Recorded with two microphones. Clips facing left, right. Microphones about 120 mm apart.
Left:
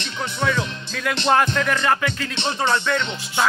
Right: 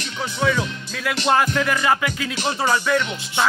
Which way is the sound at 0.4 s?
Centre (ahead or behind).